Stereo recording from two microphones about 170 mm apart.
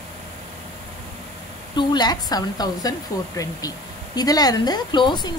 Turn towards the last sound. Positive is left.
turn(degrees=25)  # may be behind; listen again after turning